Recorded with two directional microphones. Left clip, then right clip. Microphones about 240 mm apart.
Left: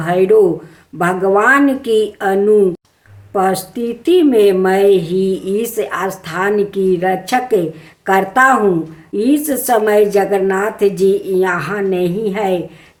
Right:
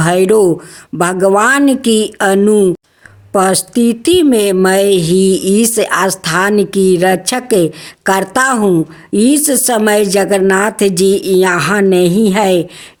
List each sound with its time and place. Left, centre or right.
0.0 s a woman's voice: right